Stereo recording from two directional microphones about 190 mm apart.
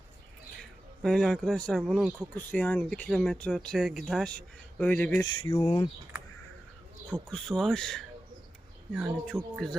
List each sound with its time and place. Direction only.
1.0 s speech: 5° left (ahead or behind)
5.5 s speech: 30° left (ahead or behind)
7.1 s speech: 5° left (ahead or behind)